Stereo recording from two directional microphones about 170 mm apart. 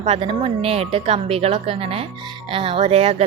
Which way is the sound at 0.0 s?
35° right (ahead or behind).